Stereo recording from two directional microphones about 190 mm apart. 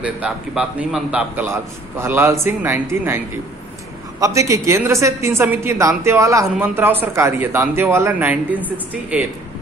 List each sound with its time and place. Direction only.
0.0 s a woman's voice: 5° right (ahead or behind)
4.2 s a woman's voice: 15° right (ahead or behind)